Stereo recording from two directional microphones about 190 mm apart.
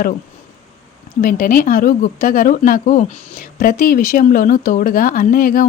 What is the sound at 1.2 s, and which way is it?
A woman's voice, 45° left (ahead or behind).